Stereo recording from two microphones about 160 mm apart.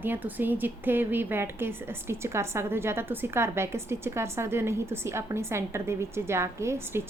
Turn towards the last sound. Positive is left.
turn(degrees=-15)  # may be behind; listen again after turning